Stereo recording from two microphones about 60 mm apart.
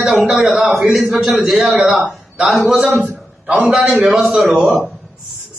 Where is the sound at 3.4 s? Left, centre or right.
Centre.